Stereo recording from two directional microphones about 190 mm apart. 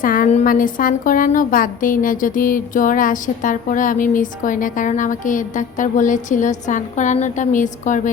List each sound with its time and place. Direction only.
0.0 s a woman's voice: 45° left (ahead or behind)